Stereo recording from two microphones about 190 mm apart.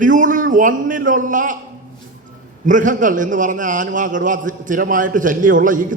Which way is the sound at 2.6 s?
45° right (ahead or behind).